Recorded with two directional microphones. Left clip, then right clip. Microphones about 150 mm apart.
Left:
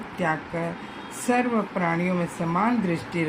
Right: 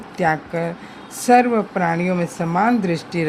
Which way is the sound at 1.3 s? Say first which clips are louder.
Right 9 dB; 90° right.